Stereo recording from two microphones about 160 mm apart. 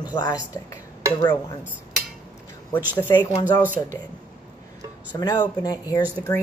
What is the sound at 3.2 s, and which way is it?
Speech, 25° left (ahead or behind).